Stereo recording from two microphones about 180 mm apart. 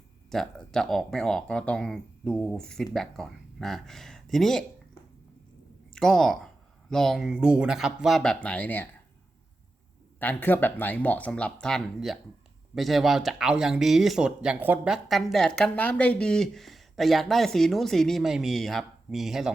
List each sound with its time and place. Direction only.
0.3 s speech: 5° left (ahead or behind)
5.9 s speech: 5° left (ahead or behind)
10.2 s speech: 10° left (ahead or behind)